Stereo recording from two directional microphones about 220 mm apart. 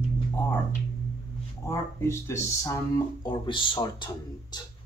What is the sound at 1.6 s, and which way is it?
Speech, 15° left (ahead or behind).